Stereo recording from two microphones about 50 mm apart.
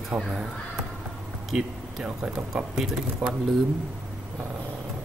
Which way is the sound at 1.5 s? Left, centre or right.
Centre.